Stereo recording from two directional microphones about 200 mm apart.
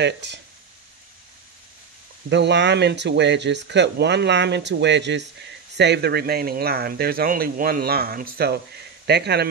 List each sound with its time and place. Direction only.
0.0 s speech: 60° right (ahead or behind)
2.2 s speech: 60° right (ahead or behind)